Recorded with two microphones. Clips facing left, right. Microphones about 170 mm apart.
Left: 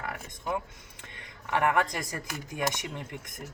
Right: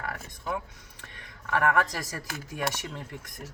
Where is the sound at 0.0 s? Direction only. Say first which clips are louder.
Even; 20° left (ahead or behind).